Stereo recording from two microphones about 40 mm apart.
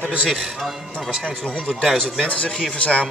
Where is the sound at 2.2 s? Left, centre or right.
Left.